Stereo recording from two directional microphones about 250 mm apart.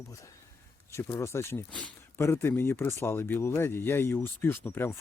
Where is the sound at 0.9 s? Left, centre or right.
Centre.